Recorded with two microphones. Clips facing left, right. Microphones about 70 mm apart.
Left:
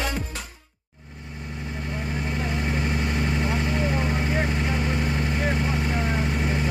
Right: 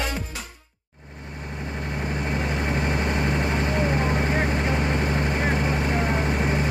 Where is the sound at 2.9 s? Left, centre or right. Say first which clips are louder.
Right 2 dB; right.